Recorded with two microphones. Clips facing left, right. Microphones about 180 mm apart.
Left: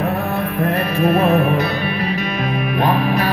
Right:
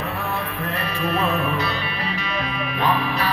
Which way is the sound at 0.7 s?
45° left (ahead or behind).